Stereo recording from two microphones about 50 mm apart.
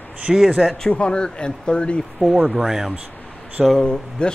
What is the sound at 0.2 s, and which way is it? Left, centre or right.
Speech, centre.